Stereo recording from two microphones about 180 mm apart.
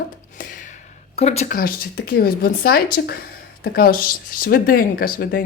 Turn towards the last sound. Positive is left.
turn(degrees=55)  # may be behind; listen again after turning